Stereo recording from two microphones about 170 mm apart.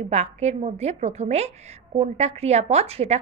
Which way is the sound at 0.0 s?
40° right (ahead or behind).